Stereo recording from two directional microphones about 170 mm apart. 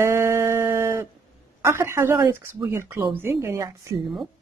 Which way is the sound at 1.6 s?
15° right (ahead or behind).